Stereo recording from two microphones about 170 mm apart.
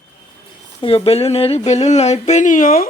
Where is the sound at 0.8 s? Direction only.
35° left (ahead or behind); by 2.9 s 55° left (ahead or behind).